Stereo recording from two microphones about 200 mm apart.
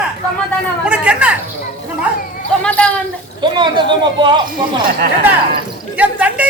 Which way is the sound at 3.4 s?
25° right (ahead or behind).